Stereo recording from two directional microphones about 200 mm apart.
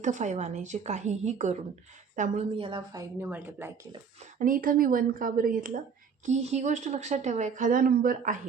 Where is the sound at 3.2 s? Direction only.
10° right (ahead or behind).